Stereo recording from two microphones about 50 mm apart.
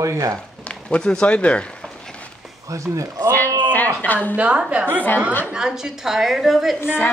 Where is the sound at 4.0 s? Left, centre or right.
Left.